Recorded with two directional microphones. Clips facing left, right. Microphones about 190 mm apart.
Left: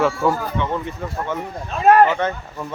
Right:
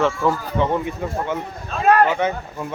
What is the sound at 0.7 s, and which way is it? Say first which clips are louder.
Speech: right 3 dB; 15° right (ahead or behind).